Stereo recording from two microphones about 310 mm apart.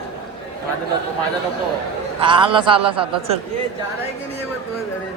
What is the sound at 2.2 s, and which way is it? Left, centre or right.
A man's voice, centre.